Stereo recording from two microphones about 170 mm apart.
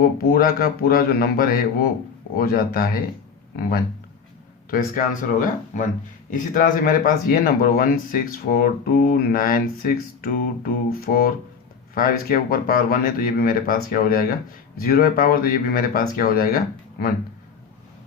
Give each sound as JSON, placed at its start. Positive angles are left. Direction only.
{"t": 0.0, "sound": "speech", "side_deg": 60}
{"t": 4.7, "sound": "speech", "side_deg": 55}